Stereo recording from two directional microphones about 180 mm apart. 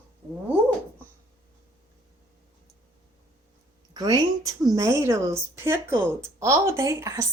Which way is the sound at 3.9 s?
20° right (ahead or behind).